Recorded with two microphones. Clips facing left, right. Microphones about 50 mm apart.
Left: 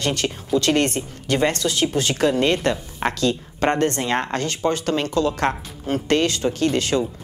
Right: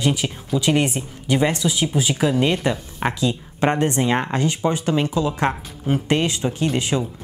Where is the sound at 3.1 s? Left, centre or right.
Centre.